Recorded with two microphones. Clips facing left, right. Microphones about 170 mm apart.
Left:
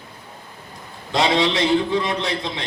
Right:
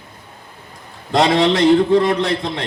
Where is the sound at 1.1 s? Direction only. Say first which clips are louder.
Right 5 dB; 50° right (ahead or behind).